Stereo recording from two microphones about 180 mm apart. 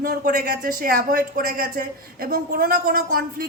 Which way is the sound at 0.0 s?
55° right (ahead or behind).